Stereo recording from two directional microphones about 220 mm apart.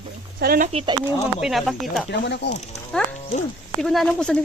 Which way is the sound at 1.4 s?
Centre (ahead or behind).